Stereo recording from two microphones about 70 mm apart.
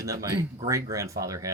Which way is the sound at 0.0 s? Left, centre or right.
Right.